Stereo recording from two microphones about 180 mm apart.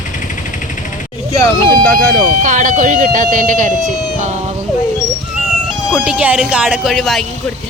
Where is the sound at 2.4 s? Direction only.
45° right (ahead or behind).